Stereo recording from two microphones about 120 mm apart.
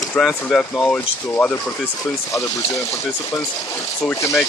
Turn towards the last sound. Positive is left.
turn(degrees=20)  # may be behind; listen again after turning